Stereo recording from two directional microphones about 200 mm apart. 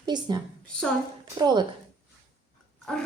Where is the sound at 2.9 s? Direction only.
5° left (ahead or behind).